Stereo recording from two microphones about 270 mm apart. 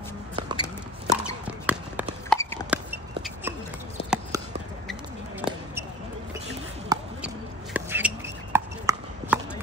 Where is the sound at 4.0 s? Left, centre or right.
Left.